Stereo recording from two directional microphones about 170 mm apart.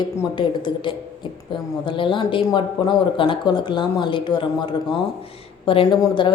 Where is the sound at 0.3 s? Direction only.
30° left (ahead or behind).